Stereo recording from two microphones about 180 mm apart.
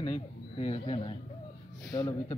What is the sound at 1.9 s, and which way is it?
Speech, 20° left (ahead or behind).